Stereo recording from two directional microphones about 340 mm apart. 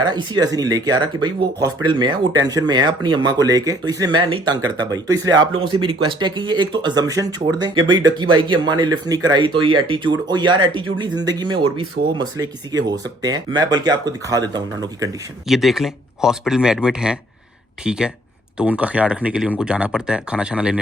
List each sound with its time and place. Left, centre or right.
0.0 s speech: centre
15.4 s speech: centre